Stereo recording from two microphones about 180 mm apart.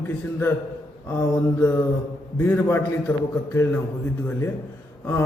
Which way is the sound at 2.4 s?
15° left (ahead or behind).